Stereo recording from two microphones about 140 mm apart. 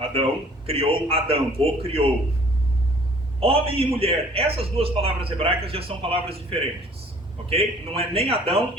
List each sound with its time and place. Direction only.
0.0 s a sound: 40° right (ahead or behind)
0.7 s a man's voice: 45° right (ahead or behind)
3.4 s a man's voice: 40° right (ahead or behind)